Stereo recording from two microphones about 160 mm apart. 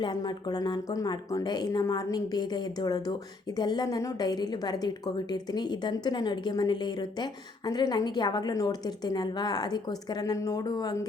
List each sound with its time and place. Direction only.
0.0 s a woman's voice: 25° left (ahead or behind)